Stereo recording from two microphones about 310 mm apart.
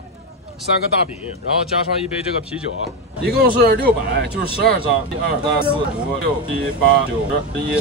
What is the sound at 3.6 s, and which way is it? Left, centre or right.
Speech, right.